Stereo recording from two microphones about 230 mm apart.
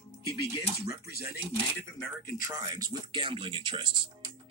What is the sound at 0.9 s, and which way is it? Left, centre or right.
Speech, left.